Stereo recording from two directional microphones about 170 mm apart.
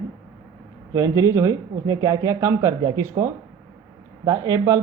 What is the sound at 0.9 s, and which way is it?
Speech, 20° right (ahead or behind).